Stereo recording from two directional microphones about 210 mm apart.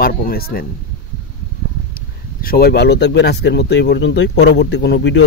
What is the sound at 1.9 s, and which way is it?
Speech, 45° left (ahead or behind).